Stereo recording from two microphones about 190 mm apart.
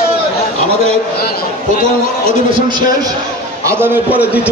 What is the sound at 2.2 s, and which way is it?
Speech, 25° right (ahead or behind).